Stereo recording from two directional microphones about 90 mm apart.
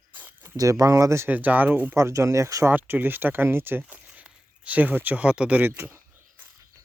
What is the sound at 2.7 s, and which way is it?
Speech, 20° right (ahead or behind).